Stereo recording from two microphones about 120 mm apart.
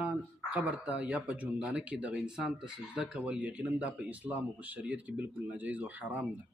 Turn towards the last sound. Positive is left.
turn(degrees=-15)  # may be behind; listen again after turning